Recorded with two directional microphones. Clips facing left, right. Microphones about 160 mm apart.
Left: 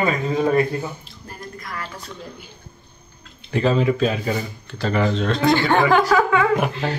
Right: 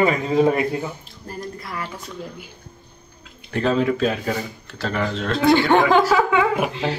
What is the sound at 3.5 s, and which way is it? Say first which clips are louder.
Speech: left 1 dB; centre (ahead or behind).